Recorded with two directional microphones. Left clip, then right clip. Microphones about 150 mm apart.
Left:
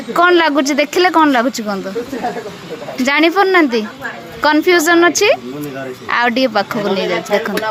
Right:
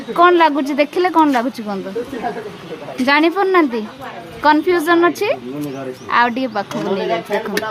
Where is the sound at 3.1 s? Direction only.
15° left (ahead or behind).